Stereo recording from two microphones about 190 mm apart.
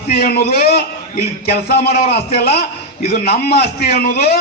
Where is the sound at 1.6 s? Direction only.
55° left (ahead or behind).